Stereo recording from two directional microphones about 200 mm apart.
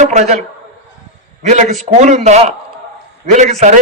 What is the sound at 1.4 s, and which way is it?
A man's voice, 35° right (ahead or behind).